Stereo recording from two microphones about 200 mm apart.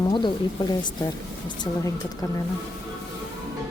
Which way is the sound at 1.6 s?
20° left (ahead or behind).